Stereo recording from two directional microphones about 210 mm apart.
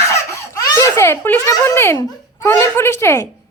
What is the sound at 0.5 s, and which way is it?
A child's voice, 15° left (ahead or behind).